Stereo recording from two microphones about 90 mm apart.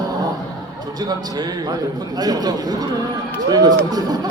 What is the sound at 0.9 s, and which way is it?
Speech, 45° right (ahead or behind).